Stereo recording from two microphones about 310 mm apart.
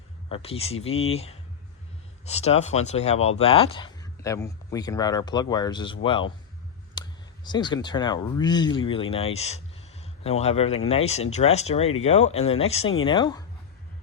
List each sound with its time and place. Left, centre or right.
0.3 s speech: centre